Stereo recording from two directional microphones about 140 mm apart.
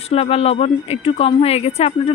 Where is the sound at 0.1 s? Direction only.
45° left (ahead or behind).